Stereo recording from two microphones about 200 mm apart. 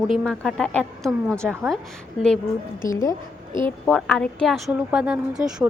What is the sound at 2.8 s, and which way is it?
A woman's voice, 15° left (ahead or behind).